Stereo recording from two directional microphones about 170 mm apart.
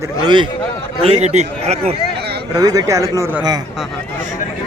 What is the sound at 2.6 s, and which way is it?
Speech, 20° right (ahead or behind).